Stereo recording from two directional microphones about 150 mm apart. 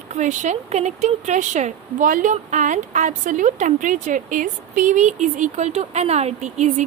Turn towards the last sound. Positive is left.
turn(degrees=-50)  # may be behind; listen again after turning